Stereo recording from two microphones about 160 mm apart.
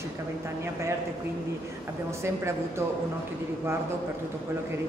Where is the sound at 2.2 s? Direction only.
15° right (ahead or behind).